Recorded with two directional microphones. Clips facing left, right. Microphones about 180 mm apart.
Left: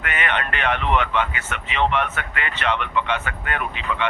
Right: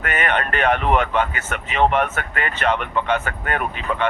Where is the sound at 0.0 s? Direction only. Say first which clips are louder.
Right 3 dB; 45° right (ahead or behind).